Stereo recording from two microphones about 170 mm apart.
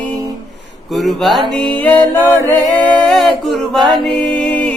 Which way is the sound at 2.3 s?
5° left (ahead or behind).